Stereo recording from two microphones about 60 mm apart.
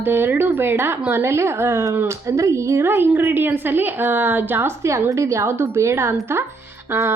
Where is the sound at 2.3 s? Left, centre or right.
Right.